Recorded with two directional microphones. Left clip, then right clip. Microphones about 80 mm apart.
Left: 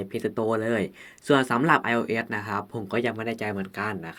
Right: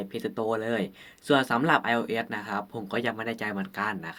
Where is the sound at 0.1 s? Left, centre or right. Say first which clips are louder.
Left 3 dB; left.